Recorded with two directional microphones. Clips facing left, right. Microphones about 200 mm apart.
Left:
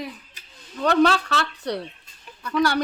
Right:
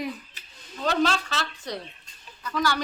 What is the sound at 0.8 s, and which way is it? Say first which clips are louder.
A woman's voice: left 6 dB; 60° left (ahead or behind).